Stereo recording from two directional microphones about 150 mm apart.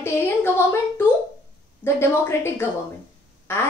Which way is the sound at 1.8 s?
15° left (ahead or behind).